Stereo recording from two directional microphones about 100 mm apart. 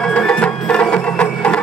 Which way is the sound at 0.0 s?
10° left (ahead or behind).